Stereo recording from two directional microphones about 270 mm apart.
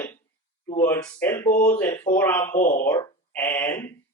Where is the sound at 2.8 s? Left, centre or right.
Centre.